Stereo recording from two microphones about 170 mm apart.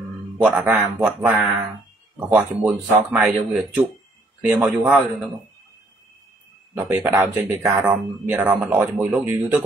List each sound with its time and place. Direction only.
0.4 s speech: 10° right (ahead or behind)
6.8 s speech: 15° right (ahead or behind)